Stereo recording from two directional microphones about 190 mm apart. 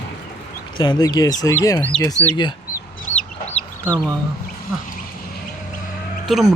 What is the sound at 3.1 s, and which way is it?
Chicken, 40° left (ahead or behind).